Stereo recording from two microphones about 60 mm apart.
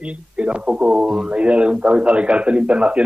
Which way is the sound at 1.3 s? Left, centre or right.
Centre.